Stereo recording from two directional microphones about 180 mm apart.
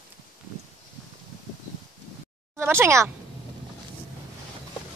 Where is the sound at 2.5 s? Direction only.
15° right (ahead or behind).